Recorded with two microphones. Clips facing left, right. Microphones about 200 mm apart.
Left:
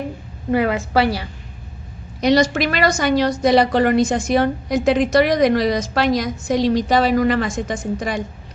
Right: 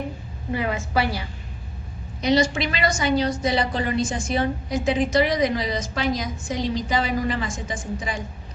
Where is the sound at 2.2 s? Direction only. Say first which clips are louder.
Left 5 dB; 70° left (ahead or behind).